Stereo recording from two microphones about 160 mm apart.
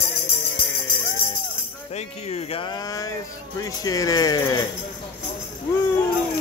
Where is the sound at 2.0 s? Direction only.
40° left (ahead or behind).